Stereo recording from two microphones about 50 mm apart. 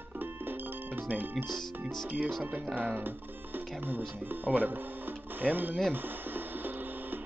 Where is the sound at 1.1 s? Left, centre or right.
Right.